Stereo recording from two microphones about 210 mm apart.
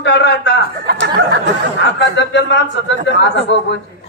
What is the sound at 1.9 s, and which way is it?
A man's voice, 55° left (ahead or behind).